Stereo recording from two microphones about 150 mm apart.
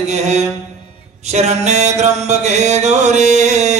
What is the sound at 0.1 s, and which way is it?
Mantra, 50° right (ahead or behind).